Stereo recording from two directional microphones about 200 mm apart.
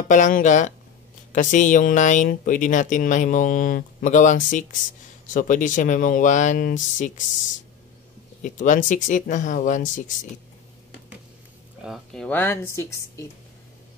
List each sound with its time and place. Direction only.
0.1 s speech: 40° left (ahead or behind)
8.4 s speech: 40° left (ahead or behind)
11.8 s speech: centre (ahead or behind)